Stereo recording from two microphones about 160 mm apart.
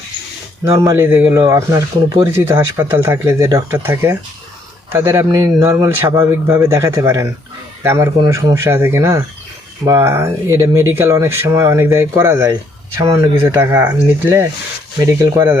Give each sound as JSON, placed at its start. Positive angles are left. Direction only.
{"t": 0.6, "sound": "speech", "side_deg": -20}